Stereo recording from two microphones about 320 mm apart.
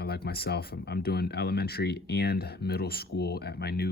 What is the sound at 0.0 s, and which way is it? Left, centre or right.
Speech, left.